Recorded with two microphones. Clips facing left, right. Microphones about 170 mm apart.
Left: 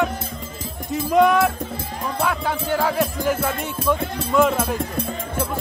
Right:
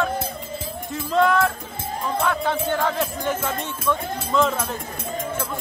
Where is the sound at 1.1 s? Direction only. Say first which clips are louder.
Left 3 dB; 15° left (ahead or behind).